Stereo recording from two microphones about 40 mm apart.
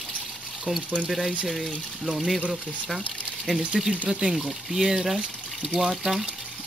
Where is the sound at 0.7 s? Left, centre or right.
Right.